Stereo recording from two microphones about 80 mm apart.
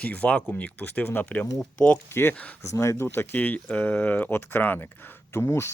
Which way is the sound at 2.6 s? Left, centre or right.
Left.